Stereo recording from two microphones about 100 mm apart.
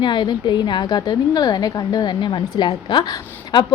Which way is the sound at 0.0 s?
50° left (ahead or behind).